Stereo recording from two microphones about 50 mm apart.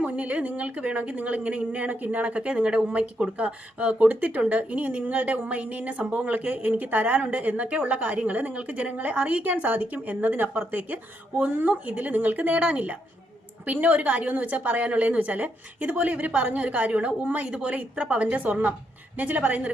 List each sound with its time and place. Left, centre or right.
0.0 s a woman's voice: right